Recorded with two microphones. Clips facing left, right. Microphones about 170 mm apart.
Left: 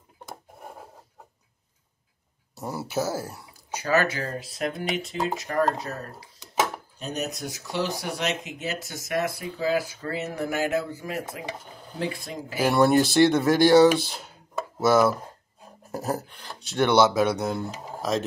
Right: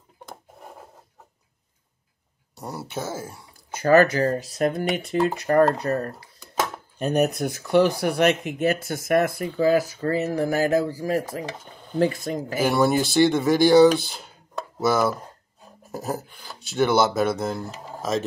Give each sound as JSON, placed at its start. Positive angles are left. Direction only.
{"t": 2.5, "sound": "speech", "side_deg": 0}
{"t": 3.8, "sound": "speech", "side_deg": -45}
{"t": 7.0, "sound": "speech", "side_deg": -60}
{"t": 11.6, "sound": "stir", "side_deg": 0}
{"t": 12.0, "sound": "speech", "side_deg": -45}
{"t": 12.6, "sound": "speech", "side_deg": 0}